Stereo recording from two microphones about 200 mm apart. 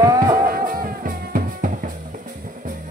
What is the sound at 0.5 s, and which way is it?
Music, 45° right (ahead or behind).